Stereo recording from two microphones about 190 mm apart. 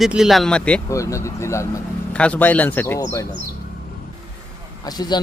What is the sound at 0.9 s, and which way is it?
Speech, 15° left (ahead or behind).